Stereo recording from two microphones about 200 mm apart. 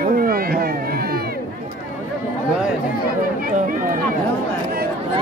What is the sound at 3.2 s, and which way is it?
Speech, 45° right (ahead or behind).